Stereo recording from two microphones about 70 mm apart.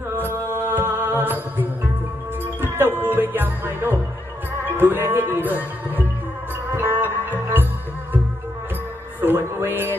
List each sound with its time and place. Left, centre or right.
0.1 s music: right
6.7 s music: right
9.2 s music: right